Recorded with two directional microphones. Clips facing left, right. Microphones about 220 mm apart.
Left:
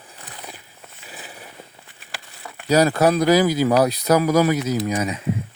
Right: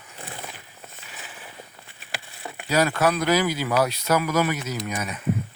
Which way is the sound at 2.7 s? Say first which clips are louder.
Left 5 dB; 40° left (ahead or behind).